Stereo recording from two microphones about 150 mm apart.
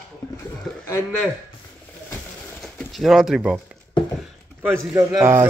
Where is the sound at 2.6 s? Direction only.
Centre (ahead or behind).